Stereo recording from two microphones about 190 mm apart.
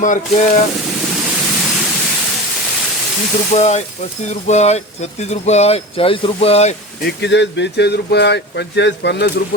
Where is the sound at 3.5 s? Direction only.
35° left (ahead or behind).